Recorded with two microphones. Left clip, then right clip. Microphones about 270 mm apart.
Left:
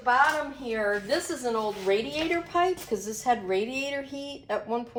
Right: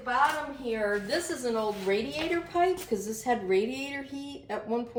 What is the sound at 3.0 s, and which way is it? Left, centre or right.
Speech, centre.